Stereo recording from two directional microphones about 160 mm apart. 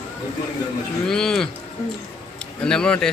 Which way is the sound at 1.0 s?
5° left (ahead or behind).